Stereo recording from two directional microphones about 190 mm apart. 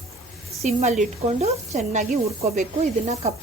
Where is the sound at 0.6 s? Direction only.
35° right (ahead or behind).